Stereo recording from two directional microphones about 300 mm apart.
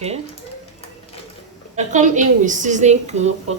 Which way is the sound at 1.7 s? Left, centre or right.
Right.